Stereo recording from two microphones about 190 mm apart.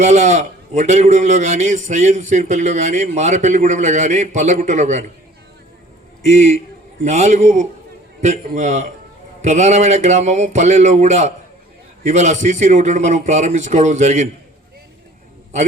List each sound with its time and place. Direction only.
0.0 s a man's voice: 40° right (ahead or behind)
6.2 s a man's voice: 35° right (ahead or behind)